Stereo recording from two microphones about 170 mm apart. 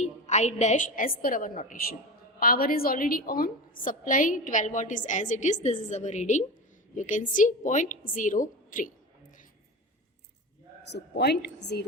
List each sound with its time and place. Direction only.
0.0 s a woman's voice: 45° left (ahead or behind)
10.9 s a woman's voice: 80° left